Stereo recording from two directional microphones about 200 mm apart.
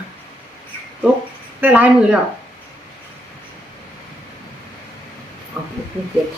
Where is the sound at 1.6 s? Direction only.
5° right (ahead or behind).